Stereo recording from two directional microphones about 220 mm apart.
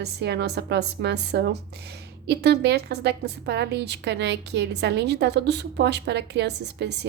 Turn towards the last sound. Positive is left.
turn(degrees=-50)  # may be behind; listen again after turning